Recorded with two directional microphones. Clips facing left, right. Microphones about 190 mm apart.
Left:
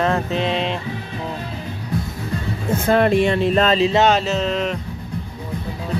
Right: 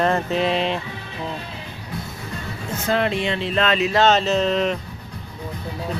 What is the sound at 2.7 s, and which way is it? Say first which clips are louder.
Speech: left 6 dB; 50° left (ahead or behind).